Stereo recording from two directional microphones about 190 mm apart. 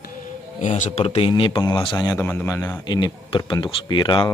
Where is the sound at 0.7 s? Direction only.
40° left (ahead or behind).